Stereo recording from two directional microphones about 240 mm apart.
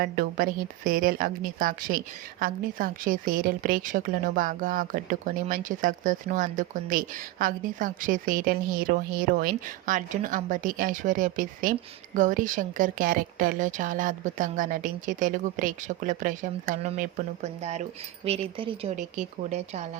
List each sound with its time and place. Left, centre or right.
0.0 s a woman's voice: right